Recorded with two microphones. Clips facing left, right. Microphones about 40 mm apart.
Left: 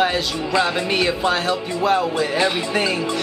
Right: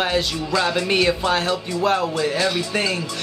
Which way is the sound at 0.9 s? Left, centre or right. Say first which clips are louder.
Even; centre.